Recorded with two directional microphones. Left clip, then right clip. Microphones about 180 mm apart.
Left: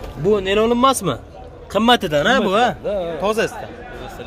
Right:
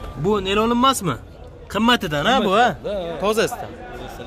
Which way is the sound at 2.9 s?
30° left (ahead or behind).